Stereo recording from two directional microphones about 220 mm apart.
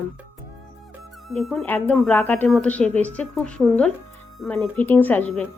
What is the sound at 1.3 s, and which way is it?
A woman's voice, centre (ahead or behind).